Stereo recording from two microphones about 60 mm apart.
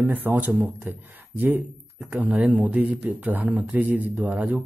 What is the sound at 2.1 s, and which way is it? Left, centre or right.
A man's voice, right.